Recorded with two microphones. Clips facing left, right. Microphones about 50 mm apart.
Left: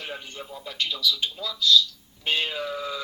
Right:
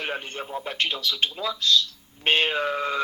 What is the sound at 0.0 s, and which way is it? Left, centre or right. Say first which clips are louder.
Speech: right 6 dB; right.